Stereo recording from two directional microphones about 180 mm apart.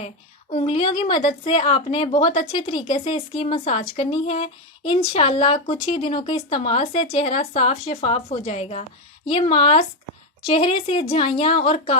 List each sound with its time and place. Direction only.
0.5 s speech: 30° left (ahead or behind)